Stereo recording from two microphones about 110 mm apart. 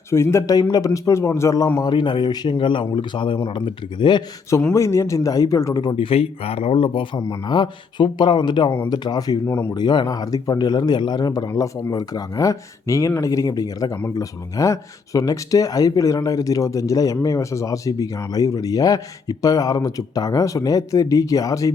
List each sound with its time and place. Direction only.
0.1 s a man's voice: 25° left (ahead or behind)
1.8 s speech: 45° left (ahead or behind)
4.7 s speech: 25° left (ahead or behind); by 6.1 s 40° left (ahead or behind)
6.1 s speech: 60° left (ahead or behind)
7.2 s speech: 30° left (ahead or behind)
7.5 s speech: 45° left (ahead or behind)
9.5 s a man's voice: 20° left (ahead or behind)
9.7 s speech: 40° left (ahead or behind)